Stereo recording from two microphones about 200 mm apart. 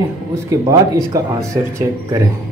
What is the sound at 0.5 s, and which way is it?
Speech, 15° right (ahead or behind).